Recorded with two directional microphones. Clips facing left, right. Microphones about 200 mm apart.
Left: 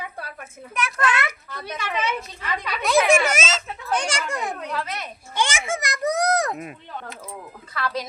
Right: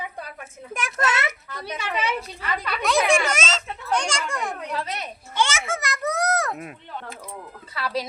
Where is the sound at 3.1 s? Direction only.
5° left (ahead or behind).